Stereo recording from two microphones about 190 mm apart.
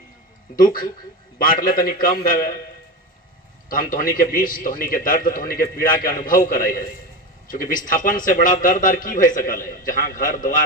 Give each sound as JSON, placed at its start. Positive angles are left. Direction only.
{"t": 0.5, "sound": "a man's voice", "side_deg": 45}
{"t": 3.7, "sound": "a man's voice", "side_deg": 45}